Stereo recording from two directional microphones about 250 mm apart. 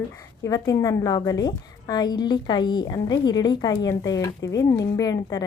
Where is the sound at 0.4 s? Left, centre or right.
Centre.